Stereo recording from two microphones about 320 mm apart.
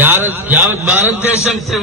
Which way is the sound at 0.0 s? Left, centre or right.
Centre.